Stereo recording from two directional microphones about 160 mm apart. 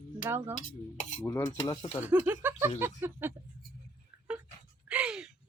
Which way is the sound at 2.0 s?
10° right (ahead or behind).